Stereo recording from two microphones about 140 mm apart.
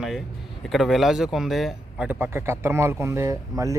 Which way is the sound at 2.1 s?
15° right (ahead or behind).